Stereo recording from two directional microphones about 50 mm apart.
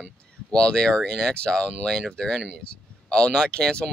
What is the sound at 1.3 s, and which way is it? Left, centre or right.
Speech, left.